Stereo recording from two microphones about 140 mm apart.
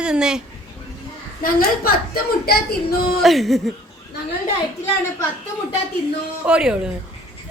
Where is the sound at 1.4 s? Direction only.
90° left.